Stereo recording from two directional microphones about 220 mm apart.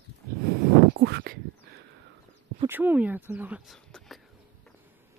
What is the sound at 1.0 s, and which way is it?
Speech, 50° right (ahead or behind).